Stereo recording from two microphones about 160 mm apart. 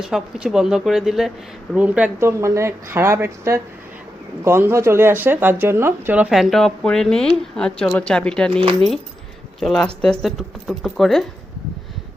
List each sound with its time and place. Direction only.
0.0 s speech: 5° right (ahead or behind)